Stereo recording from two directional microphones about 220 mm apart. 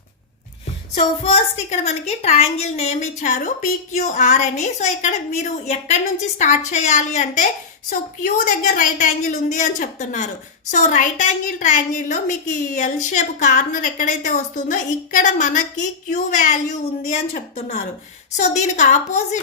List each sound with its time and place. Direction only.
0.9 s a woman's voice: 30° left (ahead or behind)